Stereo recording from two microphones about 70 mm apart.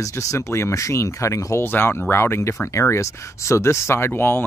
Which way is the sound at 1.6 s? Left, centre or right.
Left.